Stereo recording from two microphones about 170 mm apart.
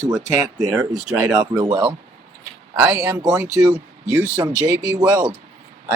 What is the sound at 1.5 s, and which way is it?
Speech, 25° right (ahead or behind).